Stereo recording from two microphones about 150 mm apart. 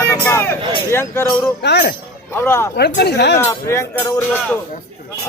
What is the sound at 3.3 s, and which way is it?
Speech, 15° left (ahead or behind).